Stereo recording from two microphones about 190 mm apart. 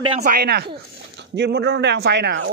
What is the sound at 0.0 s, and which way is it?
Speech, 30° right (ahead or behind).